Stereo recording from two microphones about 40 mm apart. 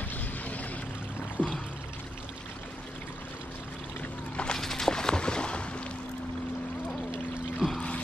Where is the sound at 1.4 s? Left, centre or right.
Right.